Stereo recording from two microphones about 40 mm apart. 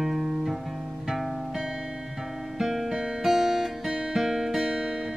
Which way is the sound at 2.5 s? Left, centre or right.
Centre.